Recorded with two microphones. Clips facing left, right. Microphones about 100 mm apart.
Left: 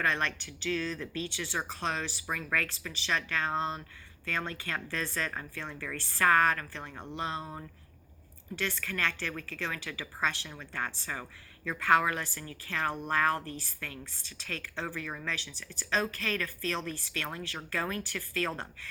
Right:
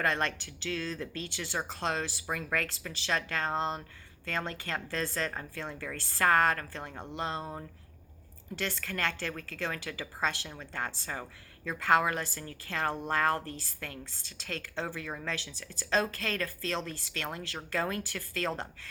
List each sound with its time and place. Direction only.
0.1 s a woman's voice: 40° right (ahead or behind)
6.9 s speech: 5° right (ahead or behind)
7.2 s a woman's voice: 35° right (ahead or behind)
8.6 s a woman's voice: 35° right (ahead or behind)
10.6 s a woman's voice: 30° right (ahead or behind)